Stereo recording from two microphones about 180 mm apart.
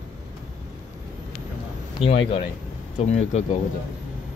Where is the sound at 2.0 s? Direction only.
30° left (ahead or behind).